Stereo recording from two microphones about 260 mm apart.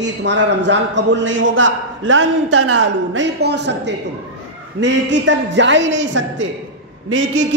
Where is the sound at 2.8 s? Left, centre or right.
Right.